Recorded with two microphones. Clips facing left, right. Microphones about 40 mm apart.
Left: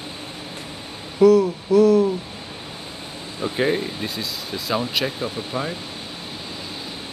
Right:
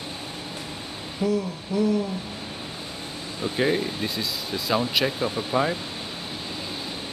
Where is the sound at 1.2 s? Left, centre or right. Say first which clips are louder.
Left 11 dB; left.